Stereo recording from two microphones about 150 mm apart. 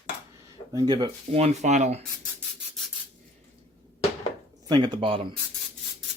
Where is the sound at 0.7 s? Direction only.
30° right (ahead or behind).